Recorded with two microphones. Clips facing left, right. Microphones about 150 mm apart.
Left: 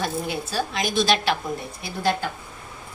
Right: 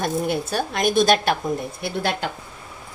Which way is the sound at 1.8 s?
70° right (ahead or behind).